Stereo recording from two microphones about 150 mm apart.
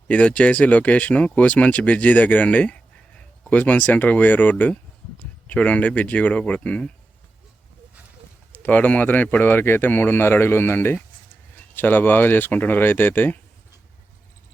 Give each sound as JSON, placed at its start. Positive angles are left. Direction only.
{"t": 0.1, "sound": "speech", "side_deg": 10}
{"t": 8.5, "sound": "speech", "side_deg": 10}